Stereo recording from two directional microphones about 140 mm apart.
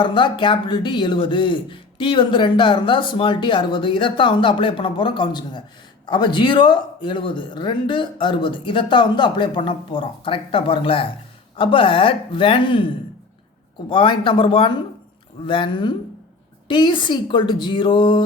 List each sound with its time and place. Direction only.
0.0 s speech: 35° left (ahead or behind)
13.9 s speech: 35° left (ahead or behind)